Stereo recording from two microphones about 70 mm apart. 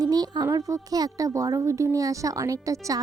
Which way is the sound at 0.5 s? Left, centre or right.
Right.